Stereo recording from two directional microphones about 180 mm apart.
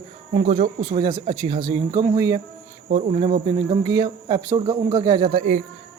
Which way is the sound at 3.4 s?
25° right (ahead or behind).